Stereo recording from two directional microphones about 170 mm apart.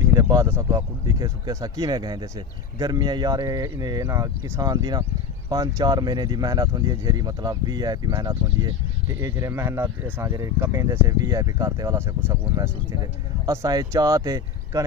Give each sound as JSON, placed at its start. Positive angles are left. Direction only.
{"t": 0.2, "sound": "speech", "side_deg": -20}